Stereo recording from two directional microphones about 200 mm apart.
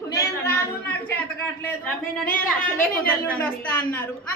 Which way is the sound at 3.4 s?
10° left (ahead or behind).